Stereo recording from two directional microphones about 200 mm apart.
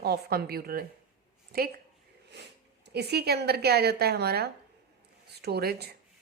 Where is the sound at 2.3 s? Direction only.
55° right (ahead or behind).